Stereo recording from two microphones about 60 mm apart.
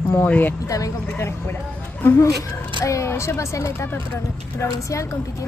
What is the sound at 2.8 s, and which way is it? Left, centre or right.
Speech, left.